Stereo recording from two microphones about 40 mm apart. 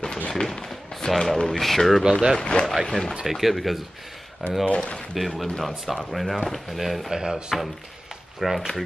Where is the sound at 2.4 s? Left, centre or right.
Left.